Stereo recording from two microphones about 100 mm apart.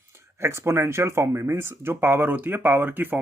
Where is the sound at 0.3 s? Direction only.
25° right (ahead or behind).